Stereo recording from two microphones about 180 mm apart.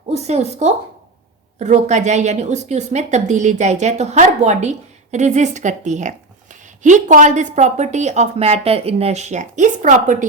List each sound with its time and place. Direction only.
0.1 s a woman's voice: 35° right (ahead or behind)